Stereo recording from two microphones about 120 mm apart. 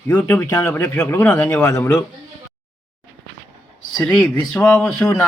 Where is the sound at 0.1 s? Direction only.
20° left (ahead or behind).